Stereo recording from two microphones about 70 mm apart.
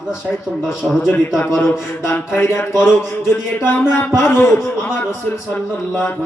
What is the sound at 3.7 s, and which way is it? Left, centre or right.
Music, left.